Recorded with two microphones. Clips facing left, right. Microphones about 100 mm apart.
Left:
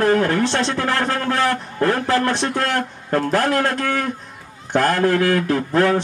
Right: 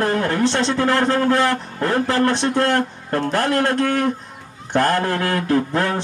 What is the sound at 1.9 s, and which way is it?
Mantra, 35° right (ahead or behind).